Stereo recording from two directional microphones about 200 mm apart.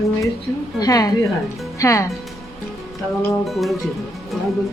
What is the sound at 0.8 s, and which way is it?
A child's voice, 20° left (ahead or behind).